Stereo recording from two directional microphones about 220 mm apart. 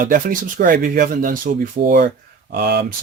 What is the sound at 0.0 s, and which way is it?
Speech, 40° right (ahead or behind).